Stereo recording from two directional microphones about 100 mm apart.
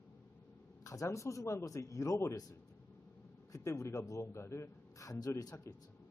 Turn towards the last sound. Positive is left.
turn(degrees=35)  # may be behind; listen again after turning